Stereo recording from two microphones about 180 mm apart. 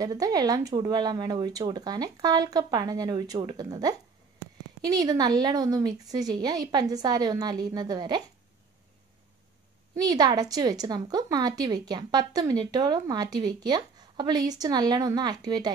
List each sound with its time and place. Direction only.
0.0 s a woman's voice: 20° right (ahead or behind)
9.9 s a woman's voice: 20° right (ahead or behind)